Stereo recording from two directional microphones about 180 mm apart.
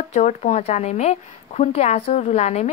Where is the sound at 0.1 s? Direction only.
40° left (ahead or behind).